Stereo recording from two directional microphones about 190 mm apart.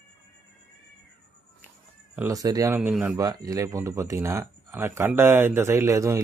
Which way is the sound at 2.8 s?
5° right (ahead or behind).